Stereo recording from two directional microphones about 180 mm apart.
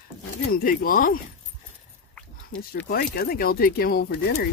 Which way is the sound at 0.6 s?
50° left (ahead or behind).